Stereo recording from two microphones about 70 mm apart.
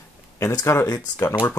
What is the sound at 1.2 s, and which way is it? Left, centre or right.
Speech, left.